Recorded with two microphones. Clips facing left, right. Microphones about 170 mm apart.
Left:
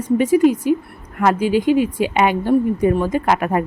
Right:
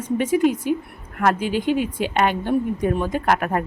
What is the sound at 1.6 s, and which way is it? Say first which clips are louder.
Speech: left 5 dB; 40° left (ahead or behind).